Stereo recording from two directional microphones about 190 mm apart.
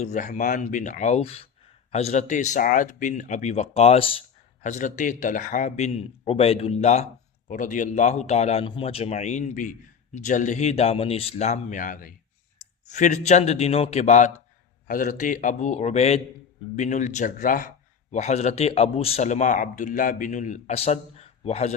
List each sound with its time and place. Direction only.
0.0 s speech: 40° left (ahead or behind)
4.6 s speech: 40° left (ahead or behind)